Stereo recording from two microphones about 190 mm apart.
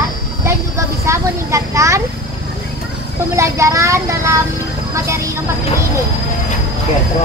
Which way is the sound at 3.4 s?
15° right (ahead or behind).